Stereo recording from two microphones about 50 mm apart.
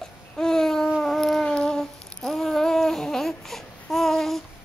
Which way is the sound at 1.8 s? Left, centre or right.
Centre.